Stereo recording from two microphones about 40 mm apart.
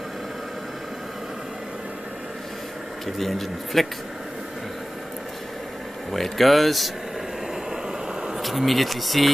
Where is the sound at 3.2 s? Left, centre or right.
Centre.